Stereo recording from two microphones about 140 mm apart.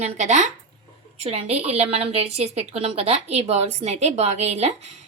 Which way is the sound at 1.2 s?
45° right (ahead or behind).